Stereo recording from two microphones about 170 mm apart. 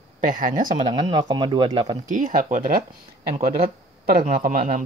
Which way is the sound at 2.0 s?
50° right (ahead or behind).